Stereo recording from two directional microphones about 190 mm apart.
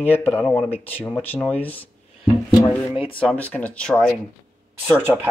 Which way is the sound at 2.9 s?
30° left (ahead or behind).